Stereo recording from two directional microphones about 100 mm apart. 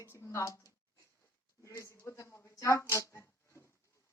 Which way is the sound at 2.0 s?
20° left (ahead or behind).